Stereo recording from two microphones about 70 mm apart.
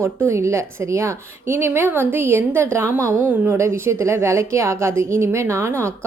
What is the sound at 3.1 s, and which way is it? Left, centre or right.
Speech, right.